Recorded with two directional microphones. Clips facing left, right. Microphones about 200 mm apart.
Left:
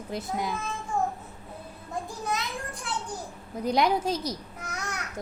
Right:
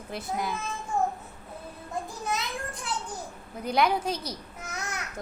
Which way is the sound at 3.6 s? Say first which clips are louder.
Left 1 dB; 20° left (ahead or behind).